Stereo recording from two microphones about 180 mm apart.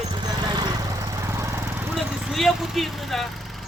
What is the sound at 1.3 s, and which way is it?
Lawn mower, 15° right (ahead or behind).